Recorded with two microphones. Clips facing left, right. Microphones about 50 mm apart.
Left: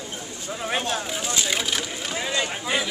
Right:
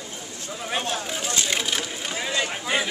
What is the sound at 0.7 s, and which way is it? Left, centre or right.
Speech, centre.